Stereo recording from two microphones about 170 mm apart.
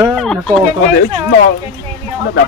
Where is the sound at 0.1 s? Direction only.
5° left (ahead or behind).